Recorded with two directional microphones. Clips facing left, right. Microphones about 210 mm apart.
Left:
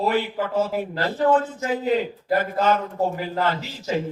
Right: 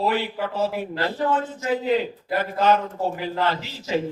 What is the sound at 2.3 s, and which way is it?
Speech, 45° left (ahead or behind).